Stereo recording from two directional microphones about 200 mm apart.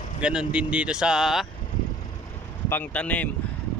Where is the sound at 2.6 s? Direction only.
10° left (ahead or behind).